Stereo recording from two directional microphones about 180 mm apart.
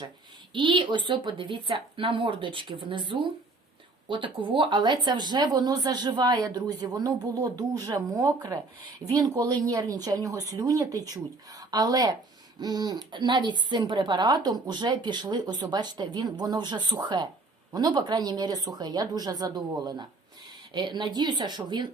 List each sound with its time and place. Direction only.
0.5 s a woman's voice: 25° right (ahead or behind)